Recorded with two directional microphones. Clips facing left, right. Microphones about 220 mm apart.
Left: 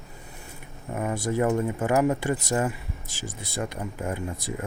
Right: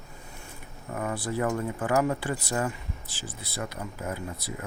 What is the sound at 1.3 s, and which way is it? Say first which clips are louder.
Speech: left 5 dB; 25° left (ahead or behind).